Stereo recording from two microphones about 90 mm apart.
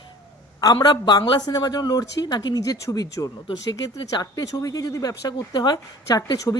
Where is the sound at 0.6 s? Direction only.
45° left (ahead or behind).